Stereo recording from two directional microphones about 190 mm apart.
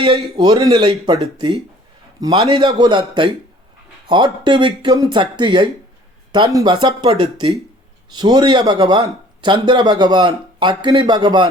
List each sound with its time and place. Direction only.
0.0 s speech: 25° right (ahead or behind)